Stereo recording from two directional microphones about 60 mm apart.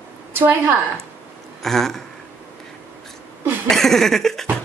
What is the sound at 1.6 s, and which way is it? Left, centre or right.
Speech, centre.